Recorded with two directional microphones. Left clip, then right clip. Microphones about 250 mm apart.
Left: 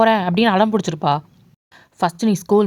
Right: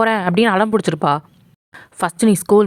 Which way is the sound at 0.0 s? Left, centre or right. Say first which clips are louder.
Even; centre.